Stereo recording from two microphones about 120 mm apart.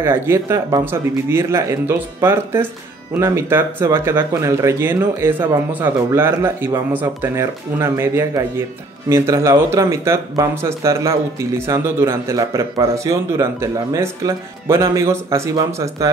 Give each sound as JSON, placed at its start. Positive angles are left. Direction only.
{"t": 0.0, "sound": "speech", "side_deg": -20}